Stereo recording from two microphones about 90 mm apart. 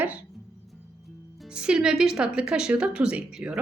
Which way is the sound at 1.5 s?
10° right (ahead or behind).